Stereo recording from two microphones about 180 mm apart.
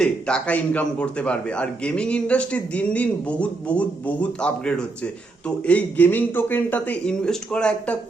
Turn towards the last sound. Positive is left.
turn(degrees=5)  # may be behind; listen again after turning